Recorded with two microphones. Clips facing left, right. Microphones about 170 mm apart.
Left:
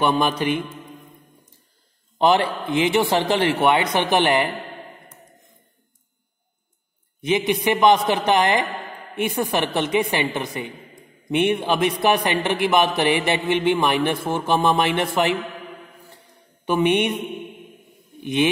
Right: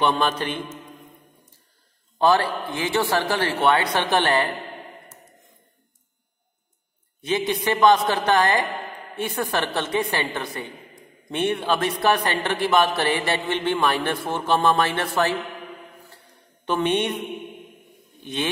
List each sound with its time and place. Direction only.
0.0 s a man's voice: 10° left (ahead or behind)
2.1 s a man's voice: 20° left (ahead or behind)
7.2 s a man's voice: 15° left (ahead or behind)
16.6 s a man's voice: 10° left (ahead or behind)
18.2 s speech: 15° left (ahead or behind)